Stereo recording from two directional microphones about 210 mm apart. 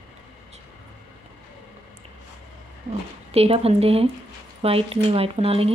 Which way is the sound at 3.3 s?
30° right (ahead or behind).